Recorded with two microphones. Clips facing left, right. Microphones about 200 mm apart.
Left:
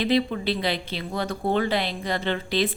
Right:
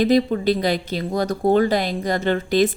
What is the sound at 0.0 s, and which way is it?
A woman's voice, 40° right (ahead or behind).